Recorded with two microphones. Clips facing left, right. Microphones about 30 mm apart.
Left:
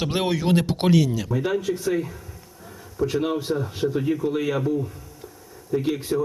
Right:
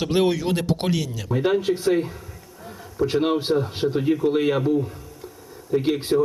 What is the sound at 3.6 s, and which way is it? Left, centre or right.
Speech, right.